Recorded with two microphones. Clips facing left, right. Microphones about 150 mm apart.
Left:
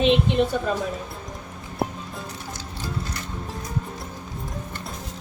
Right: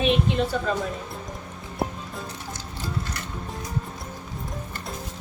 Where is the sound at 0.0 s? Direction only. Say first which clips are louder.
Left 3 dB; 20° left (ahead or behind).